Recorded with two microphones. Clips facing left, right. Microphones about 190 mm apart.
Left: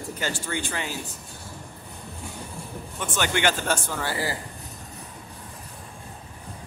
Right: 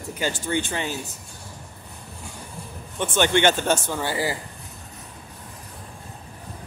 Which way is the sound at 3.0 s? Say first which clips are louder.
Right 5 dB; 25° right (ahead or behind).